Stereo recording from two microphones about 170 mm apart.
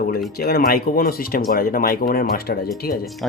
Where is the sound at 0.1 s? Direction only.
65° left (ahead or behind).